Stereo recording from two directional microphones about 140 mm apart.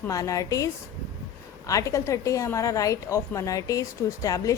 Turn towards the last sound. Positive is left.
turn(degrees=25)  # may be behind; listen again after turning